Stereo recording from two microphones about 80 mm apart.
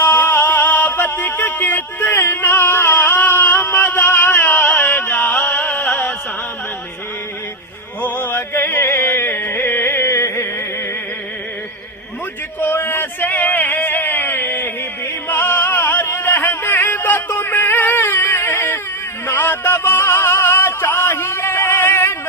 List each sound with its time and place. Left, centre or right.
0.0 s music: left
8.0 s music: left
12.5 s a sound: left
19.3 s music: left